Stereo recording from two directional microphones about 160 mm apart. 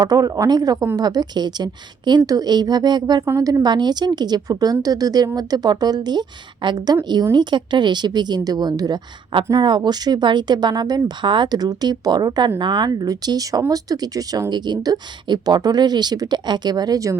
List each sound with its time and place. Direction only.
0.0 s a woman's voice: 20° right (ahead or behind)